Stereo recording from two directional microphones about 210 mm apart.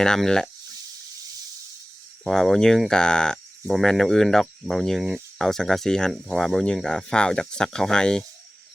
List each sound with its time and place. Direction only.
0.0 s speech: 5° left (ahead or behind)
2.2 s speech: centre (ahead or behind)